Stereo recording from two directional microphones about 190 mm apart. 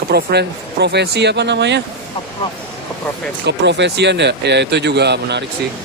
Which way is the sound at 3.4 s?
65° right (ahead or behind).